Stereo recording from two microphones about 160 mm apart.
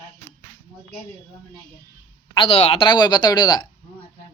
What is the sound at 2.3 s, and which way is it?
A woman's voice, 35° left (ahead or behind).